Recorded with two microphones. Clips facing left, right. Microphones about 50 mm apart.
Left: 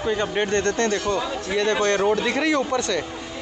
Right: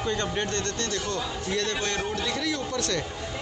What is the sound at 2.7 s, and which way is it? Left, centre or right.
Speech, centre.